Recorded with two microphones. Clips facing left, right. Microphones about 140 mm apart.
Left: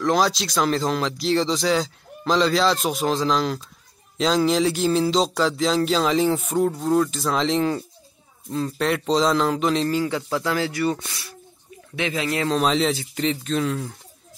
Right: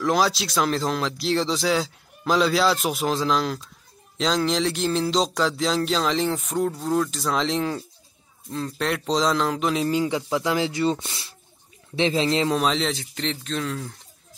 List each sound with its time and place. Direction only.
0.0 s speech: centre (ahead or behind)
9.8 s speech: 20° right (ahead or behind)
12.5 s speech: centre (ahead or behind)